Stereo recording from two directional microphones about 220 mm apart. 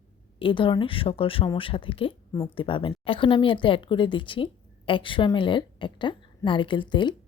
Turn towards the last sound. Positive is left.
turn(degrees=20)  # may be behind; listen again after turning